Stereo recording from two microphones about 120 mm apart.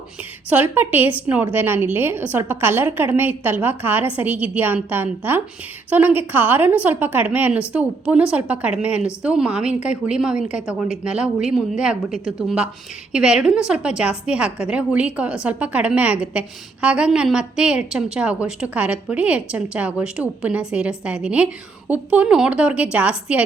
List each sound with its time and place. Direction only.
0.5 s a woman's voice: 15° right (ahead or behind)